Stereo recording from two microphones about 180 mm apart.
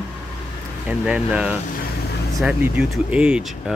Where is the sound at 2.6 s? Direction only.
5° right (ahead or behind).